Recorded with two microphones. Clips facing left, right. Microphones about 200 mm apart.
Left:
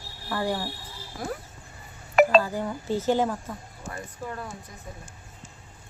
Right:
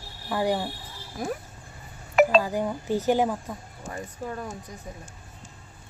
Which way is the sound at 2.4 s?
15° right (ahead or behind).